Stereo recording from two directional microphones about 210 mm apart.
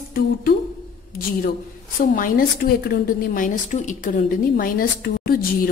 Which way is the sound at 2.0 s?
40° left (ahead or behind).